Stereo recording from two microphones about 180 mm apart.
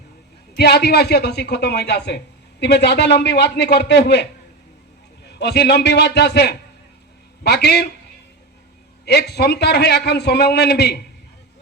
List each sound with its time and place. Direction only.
0.5 s a man's voice: 65° left (ahead or behind)
9.0 s a man's voice: 65° left (ahead or behind)